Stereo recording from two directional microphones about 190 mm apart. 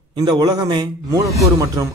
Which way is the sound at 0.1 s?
25° right (ahead or behind).